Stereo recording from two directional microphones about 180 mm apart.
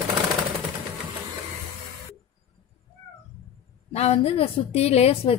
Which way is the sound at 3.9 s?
35° left (ahead or behind).